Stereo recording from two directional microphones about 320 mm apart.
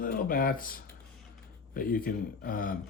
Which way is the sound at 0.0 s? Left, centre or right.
Left.